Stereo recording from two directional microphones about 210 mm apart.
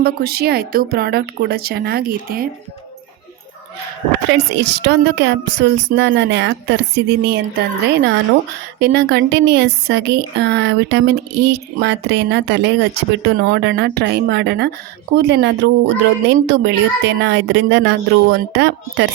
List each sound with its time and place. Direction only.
0.0 s speech: 50° right (ahead or behind)
4.3 s speech: 55° right (ahead or behind)